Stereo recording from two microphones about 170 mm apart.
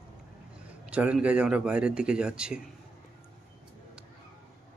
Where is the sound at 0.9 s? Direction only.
5° right (ahead or behind).